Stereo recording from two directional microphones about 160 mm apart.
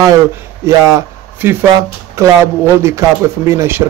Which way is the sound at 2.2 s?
15° right (ahead or behind).